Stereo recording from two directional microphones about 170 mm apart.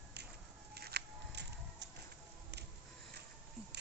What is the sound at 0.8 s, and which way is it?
Music, 70° right (ahead or behind).